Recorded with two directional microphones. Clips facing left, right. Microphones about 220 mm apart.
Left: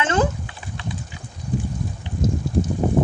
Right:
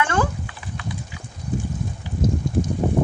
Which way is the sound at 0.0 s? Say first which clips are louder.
Left 2 dB; 20° left (ahead or behind).